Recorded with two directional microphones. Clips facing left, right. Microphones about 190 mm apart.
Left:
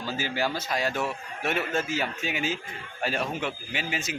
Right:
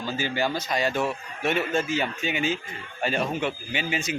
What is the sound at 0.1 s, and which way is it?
Speech, 5° left (ahead or behind).